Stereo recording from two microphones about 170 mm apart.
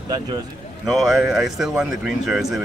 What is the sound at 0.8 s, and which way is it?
Speech, centre (ahead or behind).